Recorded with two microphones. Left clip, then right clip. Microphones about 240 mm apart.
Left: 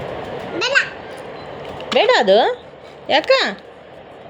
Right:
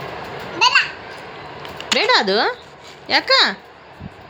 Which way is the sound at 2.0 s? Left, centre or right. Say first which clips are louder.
Left 4 dB; right.